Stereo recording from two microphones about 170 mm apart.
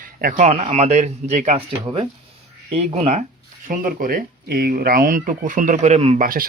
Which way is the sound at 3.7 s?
55° right (ahead or behind).